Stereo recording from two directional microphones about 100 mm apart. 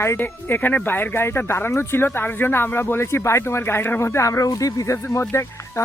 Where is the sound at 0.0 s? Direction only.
25° left (ahead or behind).